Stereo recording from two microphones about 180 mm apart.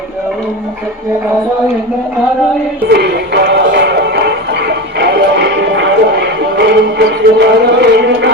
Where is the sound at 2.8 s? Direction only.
65° right (ahead or behind).